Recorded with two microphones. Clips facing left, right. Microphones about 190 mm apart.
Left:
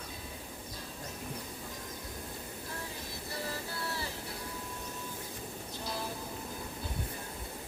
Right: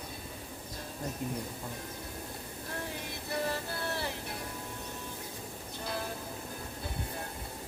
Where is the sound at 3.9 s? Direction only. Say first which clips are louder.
Right 3 dB; 65° right (ahead or behind).